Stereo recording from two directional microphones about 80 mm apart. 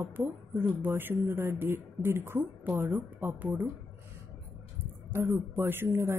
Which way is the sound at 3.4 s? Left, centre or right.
Right.